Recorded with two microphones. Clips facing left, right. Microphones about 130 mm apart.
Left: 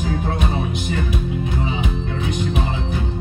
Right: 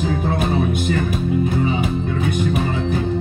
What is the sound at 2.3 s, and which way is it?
Music, 50° right (ahead or behind).